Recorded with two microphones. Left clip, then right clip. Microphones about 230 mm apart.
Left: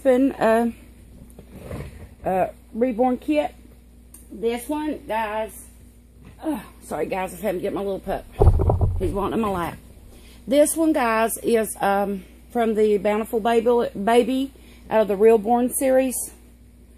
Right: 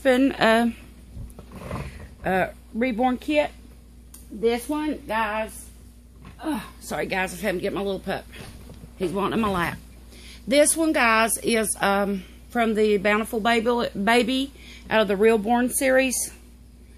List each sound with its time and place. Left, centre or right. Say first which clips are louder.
0.0 s speech: left 1 dB; right
2.2 s speech: left 2 dB; right
4.4 s a woman's voice: right 1 dB; right
6.4 s a woman's voice: left 1 dB; right